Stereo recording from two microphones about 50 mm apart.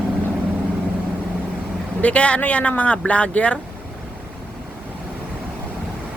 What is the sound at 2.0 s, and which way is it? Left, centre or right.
Speech, left.